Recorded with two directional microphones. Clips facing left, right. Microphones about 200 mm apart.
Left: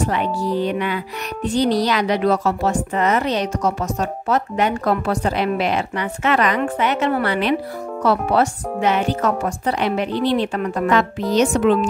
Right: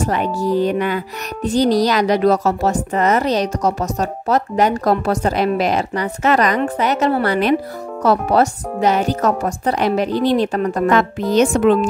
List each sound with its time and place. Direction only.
0.1 s speech: 45° right (ahead or behind)